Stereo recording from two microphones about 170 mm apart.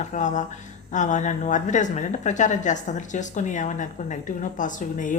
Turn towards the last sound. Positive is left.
turn(degrees=50)  # may be behind; listen again after turning